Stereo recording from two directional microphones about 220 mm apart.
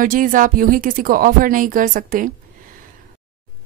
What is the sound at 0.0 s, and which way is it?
Speech, 40° right (ahead or behind).